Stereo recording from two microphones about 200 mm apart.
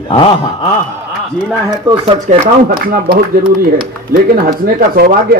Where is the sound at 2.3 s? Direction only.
40° right (ahead or behind).